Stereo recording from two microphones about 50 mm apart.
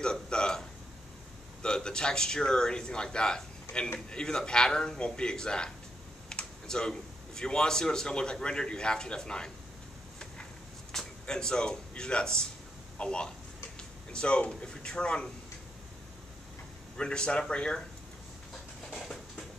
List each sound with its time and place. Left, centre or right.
0.0 s a man's voice: centre
10.9 s speech: centre
16.9 s speech: centre
18.9 s a sound: centre